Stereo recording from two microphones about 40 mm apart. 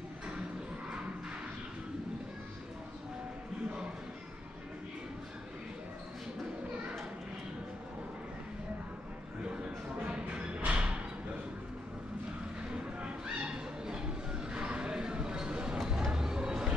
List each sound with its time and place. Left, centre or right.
10.0 s music: right
12.7 s a sound: right
15.9 s music: centre